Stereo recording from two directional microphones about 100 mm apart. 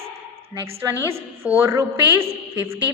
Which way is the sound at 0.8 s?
25° right (ahead or behind).